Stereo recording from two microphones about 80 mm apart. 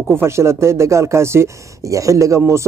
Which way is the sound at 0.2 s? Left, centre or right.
Right.